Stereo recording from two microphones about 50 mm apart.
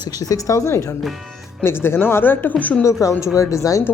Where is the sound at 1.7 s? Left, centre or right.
Left.